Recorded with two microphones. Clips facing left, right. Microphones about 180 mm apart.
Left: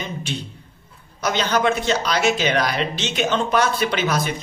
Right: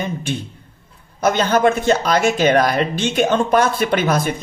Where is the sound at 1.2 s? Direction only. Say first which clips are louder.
Right 5 dB; 50° right (ahead or behind).